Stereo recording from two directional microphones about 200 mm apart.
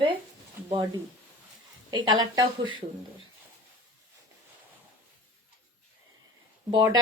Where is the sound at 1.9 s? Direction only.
25° right (ahead or behind).